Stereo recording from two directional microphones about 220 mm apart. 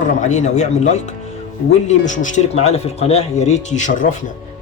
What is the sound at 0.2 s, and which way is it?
Speech, 30° left (ahead or behind).